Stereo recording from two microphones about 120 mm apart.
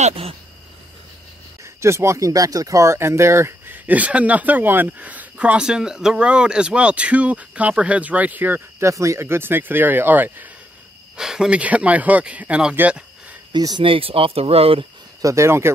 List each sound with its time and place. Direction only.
0.1 s speech: 50° right (ahead or behind)
1.6 s speech: 25° right (ahead or behind)
11.1 s speech: 5° right (ahead or behind)
13.5 s speech: 35° right (ahead or behind)
13.8 s speech: 50° right (ahead or behind)
15.2 s speech: 25° right (ahead or behind)